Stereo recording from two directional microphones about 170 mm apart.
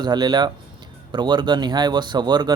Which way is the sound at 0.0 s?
25° right (ahead or behind).